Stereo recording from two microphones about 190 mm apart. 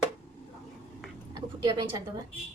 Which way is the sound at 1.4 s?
25° right (ahead or behind).